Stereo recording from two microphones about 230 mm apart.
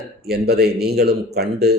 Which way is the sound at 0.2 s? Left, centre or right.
Right.